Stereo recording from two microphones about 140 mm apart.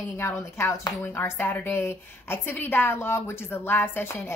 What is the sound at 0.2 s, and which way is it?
A woman's voice, 20° left (ahead or behind).